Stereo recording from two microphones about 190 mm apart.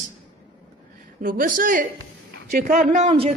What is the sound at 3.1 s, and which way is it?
Speech, 30° right (ahead or behind).